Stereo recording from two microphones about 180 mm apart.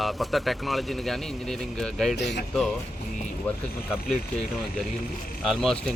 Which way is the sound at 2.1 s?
70° left (ahead or behind).